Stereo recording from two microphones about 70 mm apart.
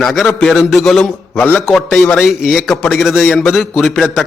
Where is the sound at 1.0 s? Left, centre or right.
Left.